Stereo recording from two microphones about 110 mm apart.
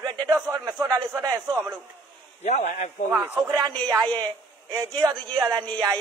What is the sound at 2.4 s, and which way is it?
Speech, 85° left.